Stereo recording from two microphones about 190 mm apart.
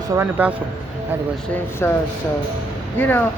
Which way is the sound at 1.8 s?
15° left (ahead or behind).